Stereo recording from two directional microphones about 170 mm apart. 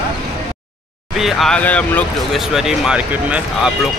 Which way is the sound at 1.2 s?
Centre (ahead or behind).